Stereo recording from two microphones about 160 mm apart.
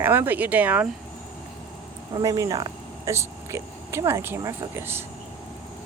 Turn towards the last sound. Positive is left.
turn(degrees=-15)  # may be behind; listen again after turning